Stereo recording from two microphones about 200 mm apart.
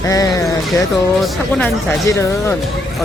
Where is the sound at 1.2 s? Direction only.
Centre (ahead or behind).